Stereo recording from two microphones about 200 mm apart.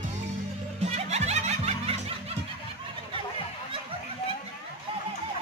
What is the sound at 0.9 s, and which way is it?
Music, 35° right (ahead or behind).